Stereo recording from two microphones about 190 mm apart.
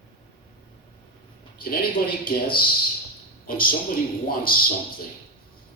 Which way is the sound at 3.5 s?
50° left (ahead or behind).